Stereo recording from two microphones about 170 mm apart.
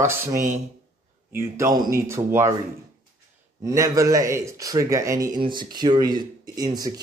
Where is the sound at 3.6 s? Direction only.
20° right (ahead or behind).